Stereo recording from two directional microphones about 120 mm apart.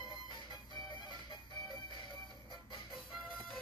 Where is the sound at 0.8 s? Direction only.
40° left (ahead or behind).